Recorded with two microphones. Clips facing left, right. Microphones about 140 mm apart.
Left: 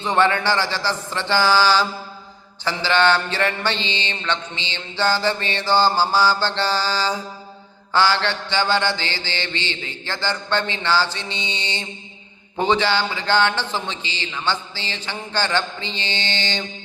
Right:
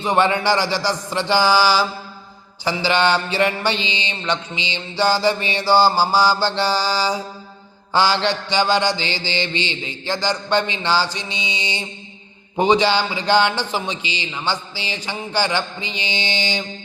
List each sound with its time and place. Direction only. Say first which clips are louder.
0.0 s mantra: right 1 dB; 15° right (ahead or behind)